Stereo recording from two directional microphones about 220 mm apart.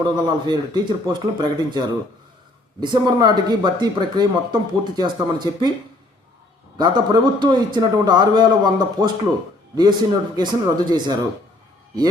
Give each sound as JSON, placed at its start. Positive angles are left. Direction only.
{"t": 0.0, "sound": "speech", "side_deg": -20}
{"t": 2.8, "sound": "speech", "side_deg": -20}
{"t": 6.7, "sound": "speech", "side_deg": -20}